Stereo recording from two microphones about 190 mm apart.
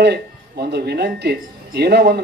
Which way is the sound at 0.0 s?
60° right (ahead or behind).